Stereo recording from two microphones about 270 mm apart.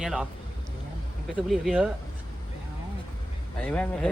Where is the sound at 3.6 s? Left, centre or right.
Centre.